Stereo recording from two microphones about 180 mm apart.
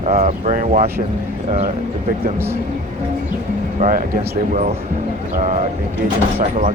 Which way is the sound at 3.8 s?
50° right (ahead or behind).